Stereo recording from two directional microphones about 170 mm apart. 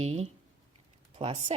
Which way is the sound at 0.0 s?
35° right (ahead or behind).